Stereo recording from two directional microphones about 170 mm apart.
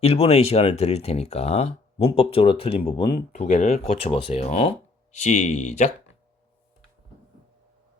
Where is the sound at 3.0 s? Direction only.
60° left (ahead or behind).